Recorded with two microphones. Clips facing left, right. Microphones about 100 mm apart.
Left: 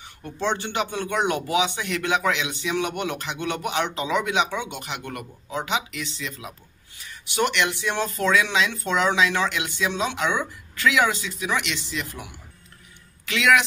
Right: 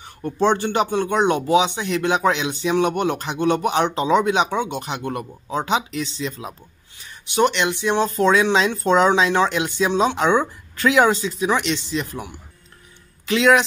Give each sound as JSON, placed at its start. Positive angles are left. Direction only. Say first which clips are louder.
{"t": 0.0, "sound": "speech", "louder": "right 8 dB", "side_deg": -40}